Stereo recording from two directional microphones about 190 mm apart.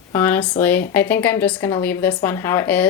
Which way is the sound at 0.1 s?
10° left (ahead or behind).